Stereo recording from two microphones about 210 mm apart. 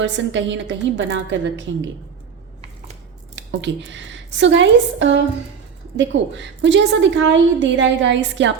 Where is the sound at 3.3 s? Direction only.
60° right (ahead or behind).